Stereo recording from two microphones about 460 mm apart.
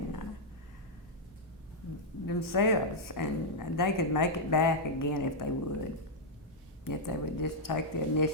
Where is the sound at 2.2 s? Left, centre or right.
Left.